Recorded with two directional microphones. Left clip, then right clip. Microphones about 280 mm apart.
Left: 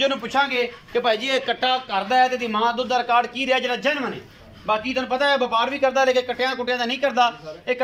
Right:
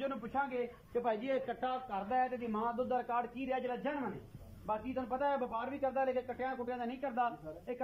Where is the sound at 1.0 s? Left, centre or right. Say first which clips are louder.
Left 15 dB; left.